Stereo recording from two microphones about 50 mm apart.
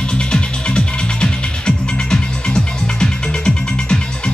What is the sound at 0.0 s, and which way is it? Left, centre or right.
Music, centre.